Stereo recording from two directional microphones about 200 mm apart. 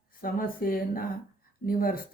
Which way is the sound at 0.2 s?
45° left (ahead or behind).